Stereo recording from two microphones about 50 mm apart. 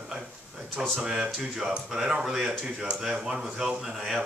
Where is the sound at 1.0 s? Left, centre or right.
Centre.